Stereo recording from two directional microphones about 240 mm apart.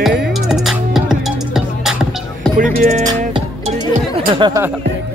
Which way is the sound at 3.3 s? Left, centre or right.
Right.